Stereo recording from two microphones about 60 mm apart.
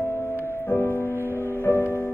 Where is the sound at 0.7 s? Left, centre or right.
Left.